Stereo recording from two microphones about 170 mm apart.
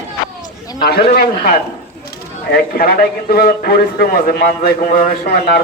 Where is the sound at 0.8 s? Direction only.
65° left (ahead or behind).